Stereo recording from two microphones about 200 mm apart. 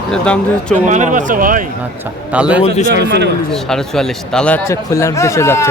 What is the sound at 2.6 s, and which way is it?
Speech, 35° left (ahead or behind).